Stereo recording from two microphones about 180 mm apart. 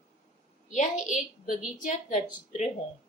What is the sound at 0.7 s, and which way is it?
A woman's voice, 40° left (ahead or behind).